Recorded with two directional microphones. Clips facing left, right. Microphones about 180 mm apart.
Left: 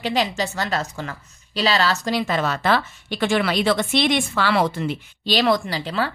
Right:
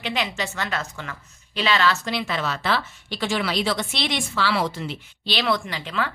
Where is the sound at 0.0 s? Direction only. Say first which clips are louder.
Left 5 dB; 35° left (ahead or behind).